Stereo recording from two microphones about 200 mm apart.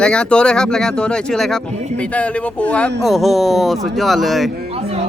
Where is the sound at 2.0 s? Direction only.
5° left (ahead or behind).